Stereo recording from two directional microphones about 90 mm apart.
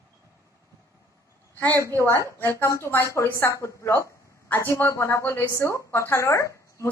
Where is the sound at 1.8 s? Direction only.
35° right (ahead or behind).